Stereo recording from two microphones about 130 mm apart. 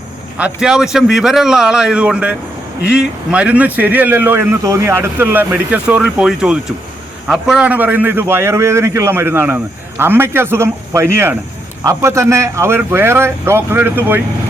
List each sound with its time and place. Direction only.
0.3 s a man's voice: 10° right (ahead or behind)